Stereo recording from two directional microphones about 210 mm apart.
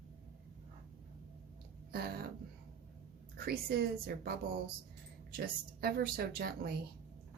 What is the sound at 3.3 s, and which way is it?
Speech, 45° right (ahead or behind).